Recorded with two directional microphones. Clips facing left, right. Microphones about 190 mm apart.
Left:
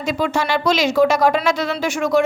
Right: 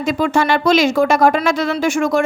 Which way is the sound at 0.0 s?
50° right (ahead or behind).